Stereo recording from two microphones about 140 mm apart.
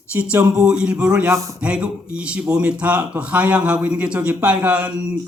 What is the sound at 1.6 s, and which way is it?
Speech, 10° right (ahead or behind).